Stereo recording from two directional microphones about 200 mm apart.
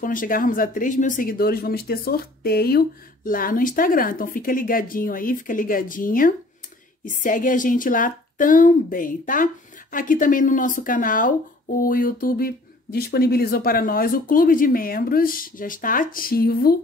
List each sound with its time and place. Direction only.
0.0 s a woman's voice: 45° left (ahead or behind)